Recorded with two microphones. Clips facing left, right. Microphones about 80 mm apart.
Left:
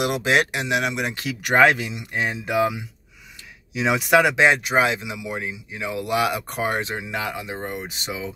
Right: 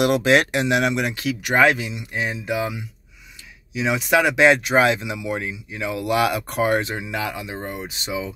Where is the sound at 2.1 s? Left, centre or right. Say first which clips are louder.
Left 2 dB; left.